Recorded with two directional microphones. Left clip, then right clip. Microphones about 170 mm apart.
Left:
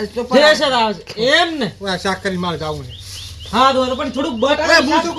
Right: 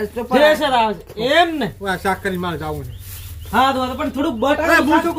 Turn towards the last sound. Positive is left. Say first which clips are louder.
# left 2 dB
turn(degrees=-15)  # may be behind; listen again after turning